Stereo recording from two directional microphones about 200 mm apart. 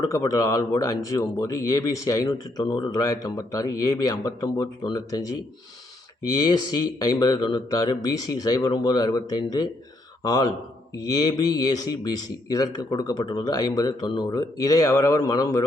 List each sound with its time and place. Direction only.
0.0 s speech: 20° left (ahead or behind)
6.3 s speech: 20° left (ahead or behind)